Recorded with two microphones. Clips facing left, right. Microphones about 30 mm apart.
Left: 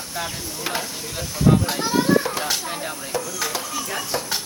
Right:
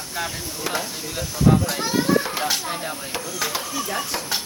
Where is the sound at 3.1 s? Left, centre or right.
Right.